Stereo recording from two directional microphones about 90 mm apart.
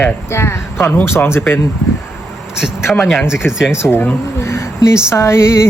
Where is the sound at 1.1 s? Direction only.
25° left (ahead or behind).